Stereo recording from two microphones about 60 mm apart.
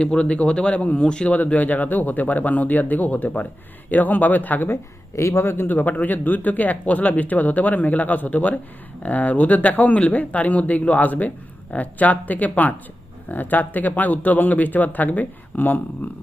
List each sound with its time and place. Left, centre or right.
0.0 s speech: centre
4.7 s speech: left
5.7 s speech: left
16.0 s a sound: left